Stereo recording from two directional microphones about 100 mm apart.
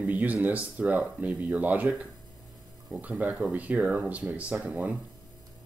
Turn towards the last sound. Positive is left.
turn(degrees=-15)  # may be behind; listen again after turning